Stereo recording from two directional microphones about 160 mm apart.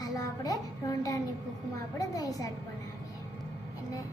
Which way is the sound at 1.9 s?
20° left (ahead or behind).